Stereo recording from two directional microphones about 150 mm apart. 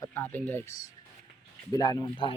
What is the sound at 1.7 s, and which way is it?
Speech, 30° left (ahead or behind).